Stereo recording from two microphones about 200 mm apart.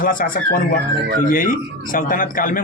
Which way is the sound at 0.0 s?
45° left (ahead or behind).